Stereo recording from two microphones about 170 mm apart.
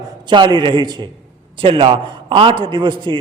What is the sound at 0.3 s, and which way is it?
A man's voice, 25° right (ahead or behind).